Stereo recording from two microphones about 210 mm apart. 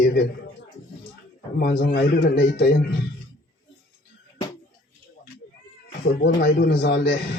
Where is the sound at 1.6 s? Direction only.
45° left (ahead or behind).